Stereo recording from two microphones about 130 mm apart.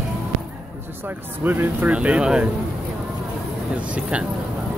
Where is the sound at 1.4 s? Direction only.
15° right (ahead or behind).